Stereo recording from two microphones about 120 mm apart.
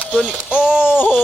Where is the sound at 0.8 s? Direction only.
15° left (ahead or behind).